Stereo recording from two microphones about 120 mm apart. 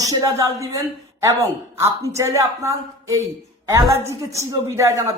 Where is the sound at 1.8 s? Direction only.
25° right (ahead or behind).